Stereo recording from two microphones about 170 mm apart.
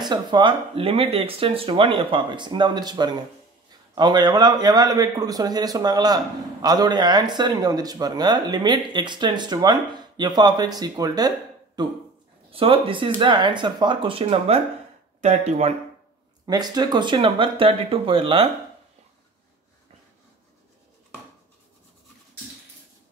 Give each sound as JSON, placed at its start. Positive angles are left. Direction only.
{"t": 0.0, "sound": "a man's voice", "side_deg": -25}
{"t": 16.4, "sound": "speech", "side_deg": -25}